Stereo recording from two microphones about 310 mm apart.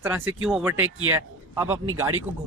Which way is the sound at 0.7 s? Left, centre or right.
Right.